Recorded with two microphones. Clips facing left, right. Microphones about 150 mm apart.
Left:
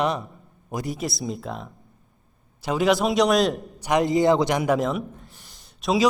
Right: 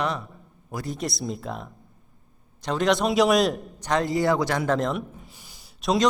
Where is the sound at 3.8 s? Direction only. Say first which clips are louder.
Left 4 dB; 15° left (ahead or behind).